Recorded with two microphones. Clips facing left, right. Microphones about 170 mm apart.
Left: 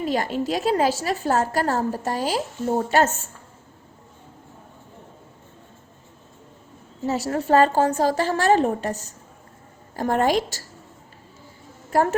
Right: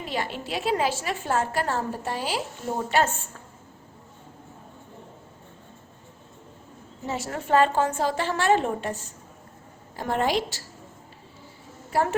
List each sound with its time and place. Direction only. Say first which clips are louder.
0.0 s a woman's voice: left 7 dB; 40° left (ahead or behind)
7.0 s a woman's voice: left 7 dB; 40° left (ahead or behind)